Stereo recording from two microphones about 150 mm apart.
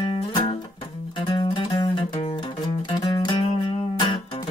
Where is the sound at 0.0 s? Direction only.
35° left (ahead or behind).